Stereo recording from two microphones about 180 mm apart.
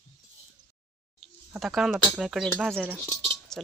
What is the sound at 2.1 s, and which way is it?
Speech, centre (ahead or behind).